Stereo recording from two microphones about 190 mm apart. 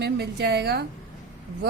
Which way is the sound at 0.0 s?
60° right (ahead or behind).